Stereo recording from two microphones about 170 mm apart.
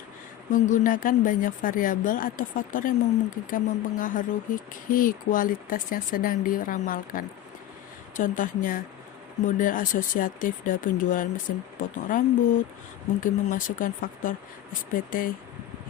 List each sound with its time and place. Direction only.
0.5 s speech: 50° left (ahead or behind)